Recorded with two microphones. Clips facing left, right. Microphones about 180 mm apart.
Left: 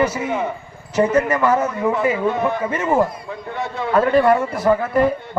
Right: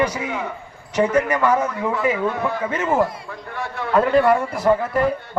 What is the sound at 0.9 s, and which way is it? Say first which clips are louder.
Speech: left 2 dB; 5° left (ahead or behind).